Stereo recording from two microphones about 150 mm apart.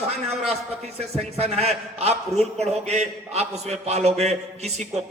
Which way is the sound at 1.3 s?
45° right (ahead or behind).